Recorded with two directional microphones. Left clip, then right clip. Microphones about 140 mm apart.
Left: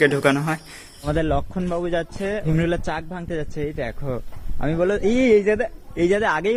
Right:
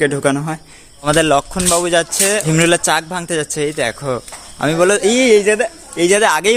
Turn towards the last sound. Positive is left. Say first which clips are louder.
# right 8 dB
turn(degrees=-15)  # may be behind; listen again after turning